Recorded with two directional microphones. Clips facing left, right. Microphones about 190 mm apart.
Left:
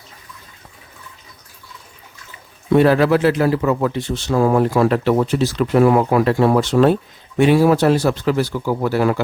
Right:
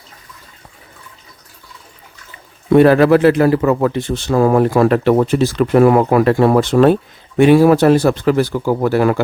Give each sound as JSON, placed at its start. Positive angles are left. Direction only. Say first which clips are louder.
{"t": 2.7, "sound": "a man's voice", "louder": "right 4 dB", "side_deg": -55}